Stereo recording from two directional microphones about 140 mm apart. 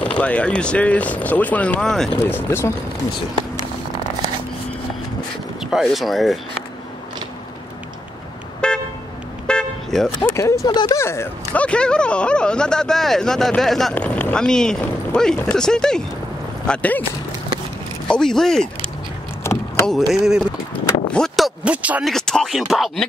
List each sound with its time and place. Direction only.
0.0 s speech: 10° left (ahead or behind)
2.1 s speech: 15° left (ahead or behind)
5.6 s speech: centre (ahead or behind)
8.6 s toot: 5° left (ahead or behind)
10.3 s speech: 20° left (ahead or behind)
18.0 s speech: 5° left (ahead or behind)
19.4 s vehicle: 20° left (ahead or behind)
20.1 s speech: 5° right (ahead or behind)
21.1 s a sound: centre (ahead or behind)
22.0 s speech: 5° left (ahead or behind)